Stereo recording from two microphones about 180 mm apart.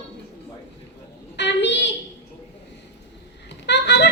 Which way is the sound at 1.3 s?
75° left (ahead or behind).